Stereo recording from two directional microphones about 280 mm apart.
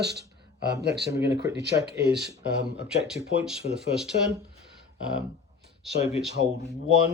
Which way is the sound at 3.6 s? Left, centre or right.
Left.